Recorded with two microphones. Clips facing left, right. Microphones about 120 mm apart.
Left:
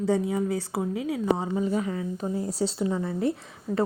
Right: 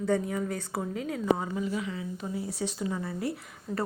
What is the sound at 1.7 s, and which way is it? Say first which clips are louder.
Speech: left 5 dB; 45° left (ahead or behind).